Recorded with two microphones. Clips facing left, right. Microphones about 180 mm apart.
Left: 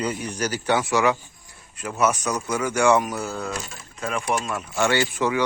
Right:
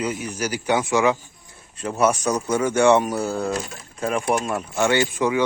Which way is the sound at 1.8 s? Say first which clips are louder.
Right 3 dB; 30° right (ahead or behind).